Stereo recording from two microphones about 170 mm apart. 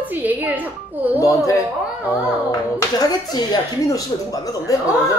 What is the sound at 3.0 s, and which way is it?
A woman's voice, 25° left (ahead or behind).